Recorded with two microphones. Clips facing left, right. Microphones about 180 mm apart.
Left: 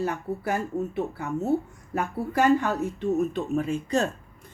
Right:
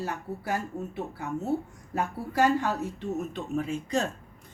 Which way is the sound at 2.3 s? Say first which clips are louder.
Left 3 dB; 55° left (ahead or behind).